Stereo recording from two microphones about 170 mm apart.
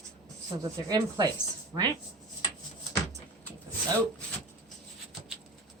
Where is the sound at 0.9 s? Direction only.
25° right (ahead or behind).